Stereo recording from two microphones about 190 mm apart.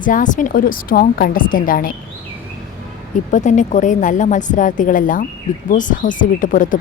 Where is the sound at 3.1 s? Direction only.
40° left (ahead or behind).